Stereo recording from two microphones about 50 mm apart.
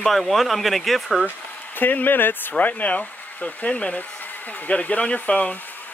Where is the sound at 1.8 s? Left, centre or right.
Left.